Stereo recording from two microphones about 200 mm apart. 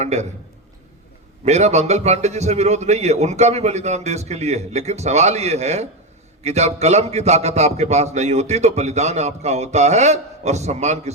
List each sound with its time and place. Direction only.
0.0 s a man's voice: 35° right (ahead or behind)
1.5 s a man's voice: 35° right (ahead or behind)